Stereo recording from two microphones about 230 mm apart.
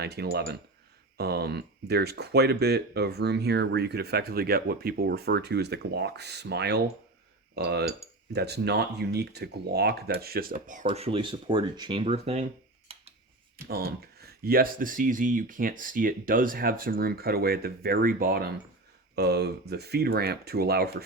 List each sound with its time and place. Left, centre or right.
0.0 s speech: right
10.8 s speech: right
12.9 s a sound: right
13.7 s speech: right